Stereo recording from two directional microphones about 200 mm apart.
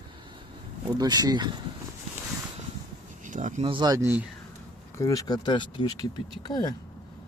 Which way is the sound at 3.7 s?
20° right (ahead or behind).